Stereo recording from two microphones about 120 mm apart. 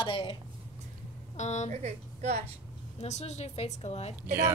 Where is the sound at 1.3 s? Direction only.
75° left (ahead or behind).